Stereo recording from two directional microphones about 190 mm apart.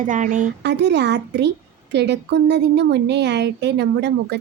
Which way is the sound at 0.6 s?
65° right (ahead or behind).